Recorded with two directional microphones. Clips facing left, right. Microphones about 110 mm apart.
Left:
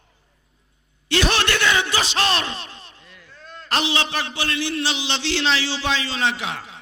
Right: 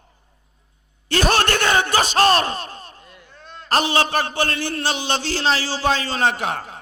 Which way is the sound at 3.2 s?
25° right (ahead or behind).